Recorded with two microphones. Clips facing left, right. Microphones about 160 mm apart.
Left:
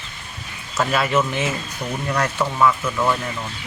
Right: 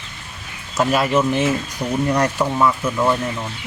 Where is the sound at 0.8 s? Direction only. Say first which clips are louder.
Right 3 dB; 10° right (ahead or behind).